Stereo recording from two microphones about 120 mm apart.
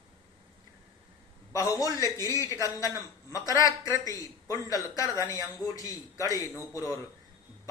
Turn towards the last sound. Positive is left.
turn(degrees=30)  # may be behind; listen again after turning